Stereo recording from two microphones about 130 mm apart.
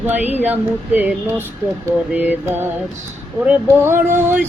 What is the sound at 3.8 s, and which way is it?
Speech, 20° right (ahead or behind).